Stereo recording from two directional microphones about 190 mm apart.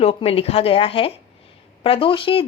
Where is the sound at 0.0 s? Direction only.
30° left (ahead or behind).